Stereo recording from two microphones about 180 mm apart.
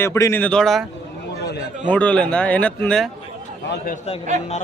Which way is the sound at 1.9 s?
5° left (ahead or behind).